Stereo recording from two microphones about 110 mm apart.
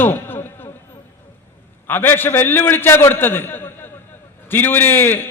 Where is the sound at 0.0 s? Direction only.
20° left (ahead or behind).